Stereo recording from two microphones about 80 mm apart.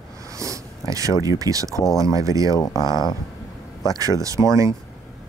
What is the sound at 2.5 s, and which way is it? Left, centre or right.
Speech, left.